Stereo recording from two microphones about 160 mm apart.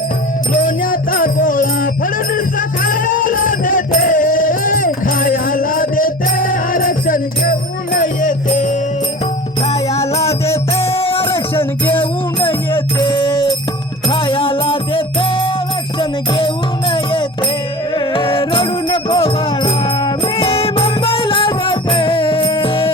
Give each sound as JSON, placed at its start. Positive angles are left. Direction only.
{"t": 0.6, "sound": "music", "side_deg": 60}
{"t": 10.2, "sound": "music", "side_deg": 15}
{"t": 10.9, "sound": "music", "side_deg": 35}
{"t": 16.9, "sound": "music", "side_deg": 30}